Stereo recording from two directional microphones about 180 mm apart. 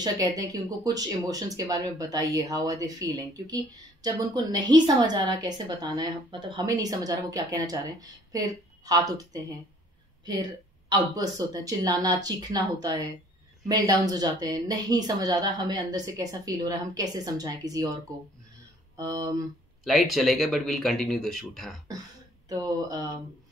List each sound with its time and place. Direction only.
0.0 s speech: 20° right (ahead or behind)
18.9 s speech: 20° right (ahead or behind)
19.8 s speech: centre (ahead or behind)
22.5 s speech: 20° right (ahead or behind)